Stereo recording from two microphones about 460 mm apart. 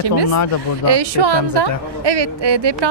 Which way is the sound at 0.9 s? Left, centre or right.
Right.